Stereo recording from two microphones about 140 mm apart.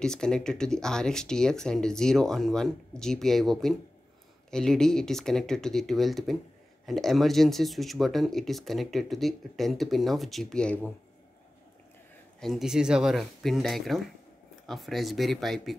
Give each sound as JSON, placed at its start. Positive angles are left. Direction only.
{"t": 0.0, "sound": "speech", "side_deg": 5}
{"t": 12.4, "sound": "speech", "side_deg": 0}